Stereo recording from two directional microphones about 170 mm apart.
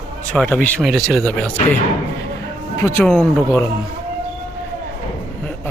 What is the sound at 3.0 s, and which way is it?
Speech, centre (ahead or behind).